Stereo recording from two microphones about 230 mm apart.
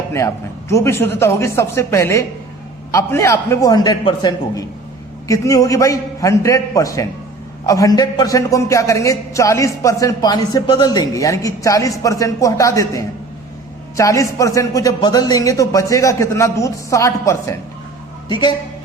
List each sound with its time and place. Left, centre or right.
0.7 s a man's voice: centre